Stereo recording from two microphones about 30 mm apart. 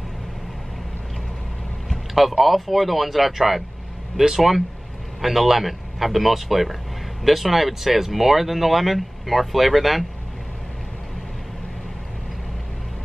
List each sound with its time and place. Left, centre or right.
2.1 s speech: centre